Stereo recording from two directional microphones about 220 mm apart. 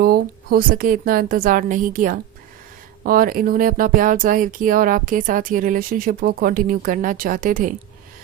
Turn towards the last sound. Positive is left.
turn(degrees=-40)  # may be behind; listen again after turning